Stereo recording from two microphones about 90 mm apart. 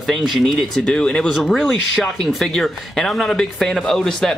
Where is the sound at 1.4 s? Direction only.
Centre (ahead or behind).